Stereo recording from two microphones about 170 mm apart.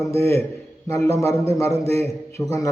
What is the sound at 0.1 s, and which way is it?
A man's voice, 15° left (ahead or behind).